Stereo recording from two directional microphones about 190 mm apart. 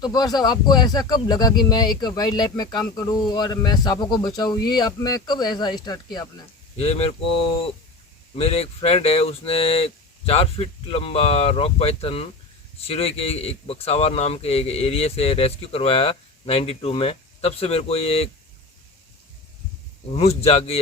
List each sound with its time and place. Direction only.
0.0 s speech: 20° left (ahead or behind)
6.8 s speech: 35° left (ahead or behind)
8.4 s speech: 30° left (ahead or behind)
20.1 s speech: 35° left (ahead or behind)